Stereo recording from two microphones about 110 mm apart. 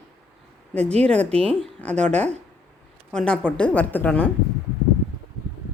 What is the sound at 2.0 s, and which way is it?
Speech, 90° right.